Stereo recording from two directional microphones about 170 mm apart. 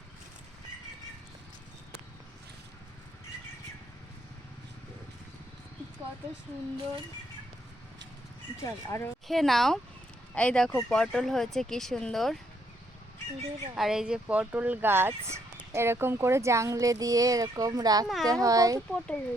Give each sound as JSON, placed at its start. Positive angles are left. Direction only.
{"t": 8.6, "sound": "speech", "side_deg": 15}
{"t": 9.2, "sound": "speech", "side_deg": 0}
{"t": 13.7, "sound": "speech", "side_deg": 0}
{"t": 18.0, "sound": "speech", "side_deg": 0}
{"t": 18.3, "sound": "a child's voice", "side_deg": -20}
{"t": 18.9, "sound": "speech", "side_deg": 5}